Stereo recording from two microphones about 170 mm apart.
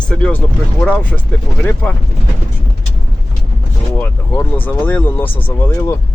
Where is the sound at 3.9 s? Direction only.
10° left (ahead or behind).